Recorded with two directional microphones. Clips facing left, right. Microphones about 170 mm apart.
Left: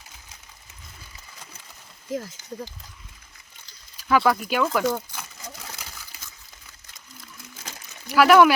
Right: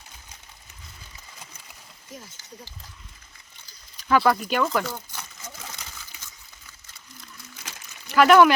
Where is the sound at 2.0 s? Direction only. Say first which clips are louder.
Left 13 dB; 90° left.